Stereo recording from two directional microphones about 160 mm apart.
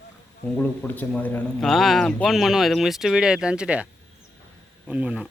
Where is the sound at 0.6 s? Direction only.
10° left (ahead or behind); by 3.9 s 5° right (ahead or behind).